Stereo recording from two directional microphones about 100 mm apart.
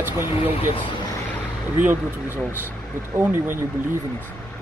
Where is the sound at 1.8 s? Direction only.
20° right (ahead or behind).